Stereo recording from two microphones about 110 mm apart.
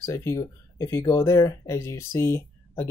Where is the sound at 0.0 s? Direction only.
30° left (ahead or behind).